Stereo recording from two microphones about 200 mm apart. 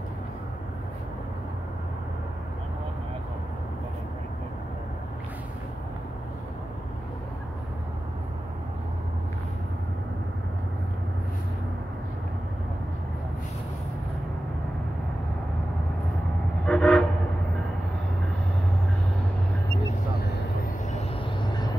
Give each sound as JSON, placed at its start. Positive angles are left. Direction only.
{"t": 16.6, "sound": "train", "side_deg": 5}
{"t": 20.9, "sound": "vehicle", "side_deg": 25}